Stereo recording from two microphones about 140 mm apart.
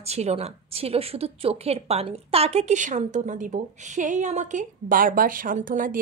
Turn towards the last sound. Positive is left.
turn(degrees=-75)  # may be behind; listen again after turning